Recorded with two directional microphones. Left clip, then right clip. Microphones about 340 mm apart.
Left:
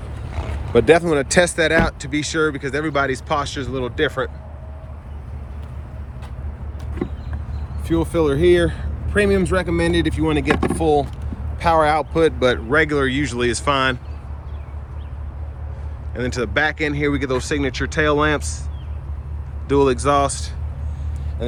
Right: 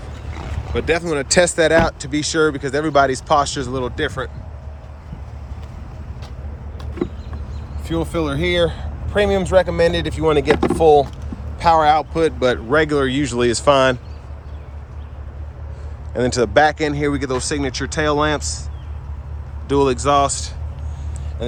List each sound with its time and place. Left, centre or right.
0.7 s speech: centre
7.9 s speech: centre
16.1 s speech: centre
19.6 s speech: centre